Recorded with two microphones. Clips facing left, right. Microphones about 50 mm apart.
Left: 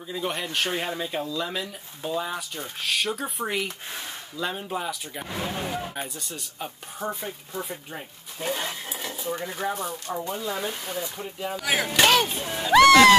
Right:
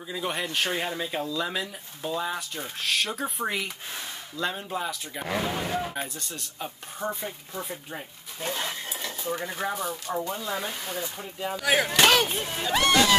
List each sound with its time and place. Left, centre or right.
0.1 s speech: centre
12.4 s speech: centre
12.7 s speech: left